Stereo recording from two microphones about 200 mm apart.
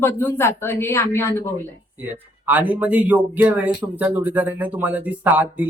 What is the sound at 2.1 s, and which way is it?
Speech, 10° right (ahead or behind).